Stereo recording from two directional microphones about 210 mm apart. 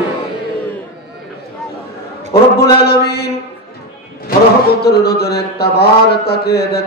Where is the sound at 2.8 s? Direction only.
50° left (ahead or behind).